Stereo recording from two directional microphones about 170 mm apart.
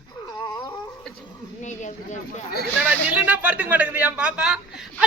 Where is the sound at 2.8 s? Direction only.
10° right (ahead or behind).